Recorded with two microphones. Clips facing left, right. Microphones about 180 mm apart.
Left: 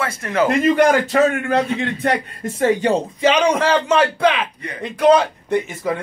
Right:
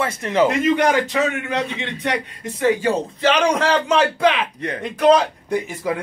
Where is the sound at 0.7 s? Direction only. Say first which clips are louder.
Left 4 dB; 50° left (ahead or behind).